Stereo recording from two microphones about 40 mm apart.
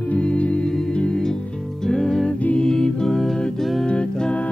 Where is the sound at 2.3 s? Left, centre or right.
Left.